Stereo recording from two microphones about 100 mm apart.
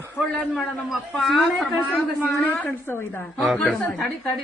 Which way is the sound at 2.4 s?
20° left (ahead or behind).